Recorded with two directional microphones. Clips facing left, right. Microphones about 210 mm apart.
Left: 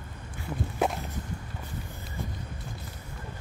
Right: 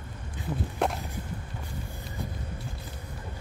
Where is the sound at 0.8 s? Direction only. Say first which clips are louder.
Left 1 dB; 5° left (ahead or behind).